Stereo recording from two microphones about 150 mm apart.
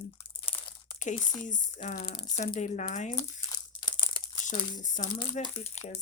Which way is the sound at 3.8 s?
30° left (ahead or behind).